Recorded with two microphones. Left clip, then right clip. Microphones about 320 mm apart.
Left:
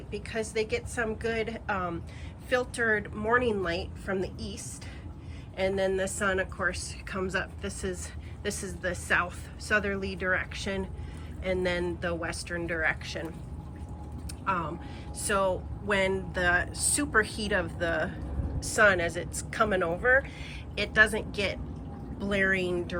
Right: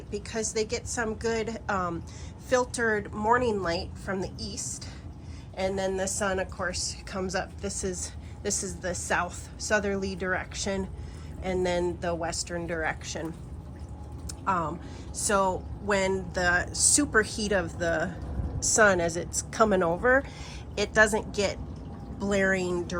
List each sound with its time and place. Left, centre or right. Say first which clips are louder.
0.1 s a woman's voice: right 1 dB; centre
5.5 s a woman's voice: left 1 dB; centre
14.4 s a woman's voice: right 2 dB; centre